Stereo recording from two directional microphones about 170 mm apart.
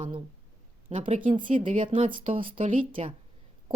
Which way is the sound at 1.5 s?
50° right (ahead or behind).